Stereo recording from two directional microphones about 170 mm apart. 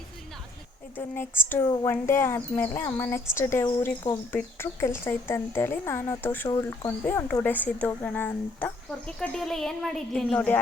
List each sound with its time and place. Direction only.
0.9 s speech: 10° left (ahead or behind)